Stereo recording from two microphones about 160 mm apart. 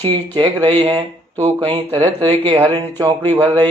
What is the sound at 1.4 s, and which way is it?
Speech, 35° right (ahead or behind).